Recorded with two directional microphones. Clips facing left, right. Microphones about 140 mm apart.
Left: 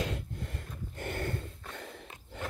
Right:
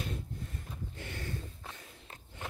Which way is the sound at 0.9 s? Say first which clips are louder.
Left 8 dB; 55° left (ahead or behind).